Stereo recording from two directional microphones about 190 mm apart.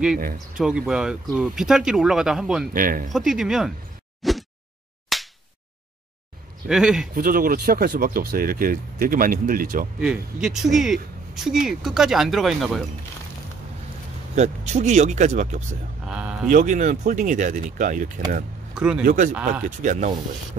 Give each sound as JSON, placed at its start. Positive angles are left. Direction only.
{"t": 0.6, "sound": "speech", "side_deg": -5}
{"t": 2.7, "sound": "speech", "side_deg": -45}
{"t": 3.1, "sound": "speech", "side_deg": 0}
{"t": 4.2, "sound": "a sound", "side_deg": 0}
{"t": 5.1, "sound": "slap", "side_deg": 0}
{"t": 6.7, "sound": "speech", "side_deg": 0}
{"t": 7.2, "sound": "speech", "side_deg": -50}
{"t": 9.9, "sound": "speech", "side_deg": -5}
{"t": 14.3, "sound": "speech", "side_deg": -35}
{"t": 18.8, "sound": "speech", "side_deg": -5}
{"t": 19.0, "sound": "speech", "side_deg": -45}
{"t": 19.3, "sound": "speech", "side_deg": -5}
{"t": 19.6, "sound": "speech", "side_deg": -40}